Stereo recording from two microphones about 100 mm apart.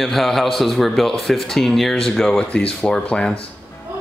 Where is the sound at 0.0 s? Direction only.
Centre (ahead or behind).